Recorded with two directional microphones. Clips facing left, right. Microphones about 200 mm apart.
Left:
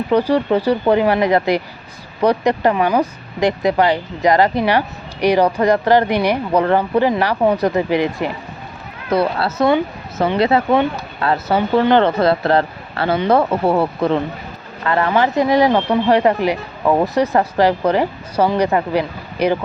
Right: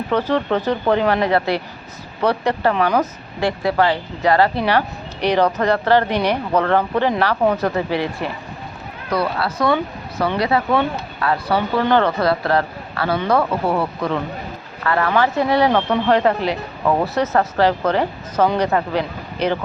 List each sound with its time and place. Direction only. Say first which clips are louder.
0.1 s speech: left 4 dB; 15° left (ahead or behind)